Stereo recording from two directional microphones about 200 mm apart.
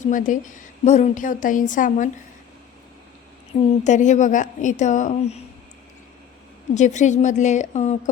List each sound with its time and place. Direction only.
0.0 s a woman's voice: 40° left (ahead or behind)
3.5 s a woman's voice: 30° left (ahead or behind)
6.7 s a woman's voice: 35° left (ahead or behind)